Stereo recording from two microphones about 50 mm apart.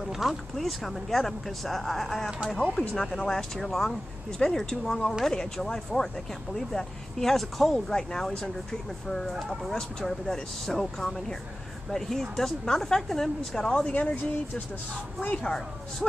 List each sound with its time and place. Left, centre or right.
0.0 s speech: centre
9.5 s speech: centre
13.9 s speech: left
15.3 s speech: centre